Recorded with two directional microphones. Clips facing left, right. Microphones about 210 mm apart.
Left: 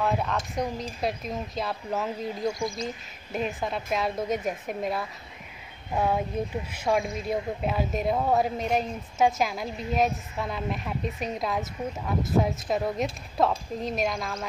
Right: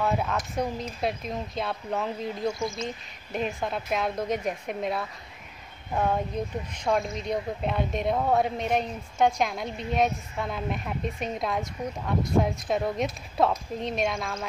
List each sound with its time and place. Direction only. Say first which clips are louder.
0.0 s a woman's voice: even; centre (ahead or behind)
2.6 s speech: even; 25° right (ahead or behind)
3.3 s a woman's voice: even; centre (ahead or behind)